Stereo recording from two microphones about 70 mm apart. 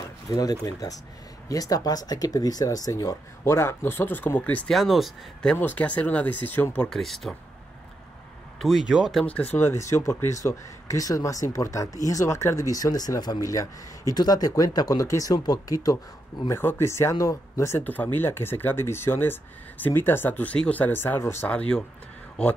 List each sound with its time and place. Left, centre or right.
0.3 s speech: left
4.6 s speech: centre
5.6 s speech: left
6.8 s speech: centre
8.5 s speech: centre
9.2 s speech: left
9.7 s speech: left
12.5 s speech: left
16.4 s speech: left
17.7 s speech: left
21.5 s speech: centre